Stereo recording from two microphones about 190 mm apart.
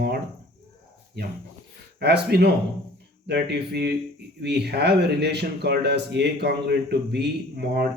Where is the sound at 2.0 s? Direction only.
60° right (ahead or behind).